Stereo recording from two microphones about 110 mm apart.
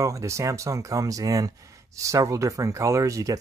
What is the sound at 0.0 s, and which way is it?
Speech, 30° right (ahead or behind).